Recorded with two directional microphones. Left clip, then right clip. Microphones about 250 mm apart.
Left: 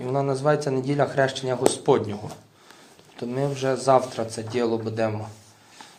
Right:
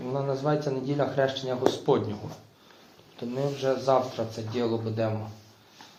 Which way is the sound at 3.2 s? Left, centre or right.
Left.